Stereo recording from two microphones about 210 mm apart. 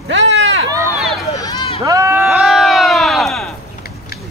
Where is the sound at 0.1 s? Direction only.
60° right (ahead or behind).